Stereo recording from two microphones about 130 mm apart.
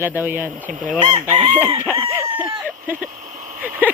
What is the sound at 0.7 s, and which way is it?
Speech, 90° right.